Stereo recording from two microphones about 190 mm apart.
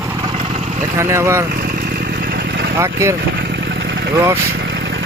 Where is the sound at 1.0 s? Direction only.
15° right (ahead or behind).